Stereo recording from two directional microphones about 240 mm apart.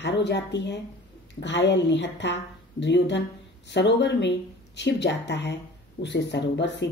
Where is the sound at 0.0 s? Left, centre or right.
Left.